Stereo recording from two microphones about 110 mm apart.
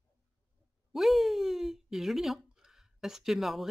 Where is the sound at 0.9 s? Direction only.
Centre (ahead or behind).